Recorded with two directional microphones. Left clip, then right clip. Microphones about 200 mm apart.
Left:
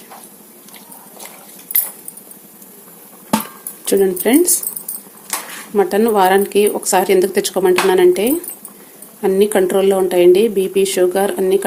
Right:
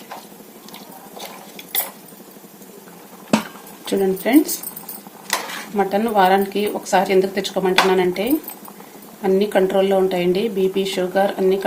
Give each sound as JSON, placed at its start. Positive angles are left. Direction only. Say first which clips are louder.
{"t": 3.8, "sound": "speech", "louder": "left 5 dB", "side_deg": 45}
{"t": 5.7, "sound": "speech", "louder": "left 4 dB", "side_deg": 45}